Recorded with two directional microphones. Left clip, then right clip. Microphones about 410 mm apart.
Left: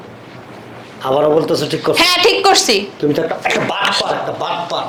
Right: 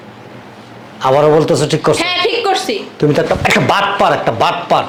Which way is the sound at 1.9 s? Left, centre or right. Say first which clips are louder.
Left 3 dB; left.